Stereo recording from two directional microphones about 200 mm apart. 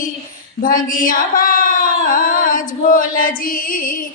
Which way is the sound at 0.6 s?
45° left (ahead or behind).